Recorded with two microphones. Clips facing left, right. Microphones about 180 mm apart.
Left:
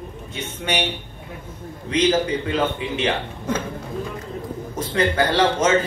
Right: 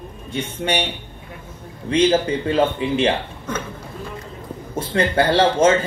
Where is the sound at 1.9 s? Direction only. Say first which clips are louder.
Right 3 dB; 30° right (ahead or behind).